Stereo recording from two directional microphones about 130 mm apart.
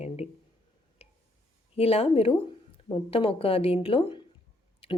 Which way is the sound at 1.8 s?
50° left (ahead or behind).